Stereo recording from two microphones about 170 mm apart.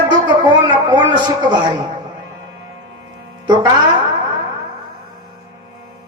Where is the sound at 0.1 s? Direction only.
25° right (ahead or behind).